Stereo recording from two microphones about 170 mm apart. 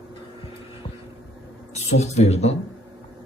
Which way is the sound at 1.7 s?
40° left (ahead or behind).